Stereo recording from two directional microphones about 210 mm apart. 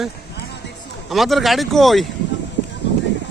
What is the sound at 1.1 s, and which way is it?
Speech, centre (ahead or behind).